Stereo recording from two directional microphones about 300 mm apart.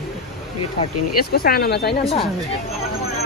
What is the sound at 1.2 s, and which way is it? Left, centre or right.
Speech, left.